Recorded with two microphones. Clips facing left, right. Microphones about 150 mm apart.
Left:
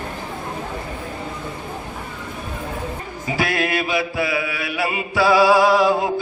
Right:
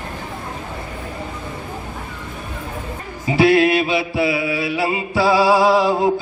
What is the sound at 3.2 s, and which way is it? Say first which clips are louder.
Mantra: right 9 dB; 25° right (ahead or behind).